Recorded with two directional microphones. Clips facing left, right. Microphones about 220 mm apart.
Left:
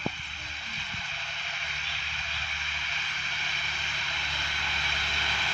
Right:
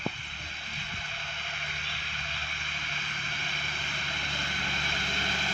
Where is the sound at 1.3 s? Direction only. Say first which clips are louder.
Right 1 dB; 55° right (ahead or behind).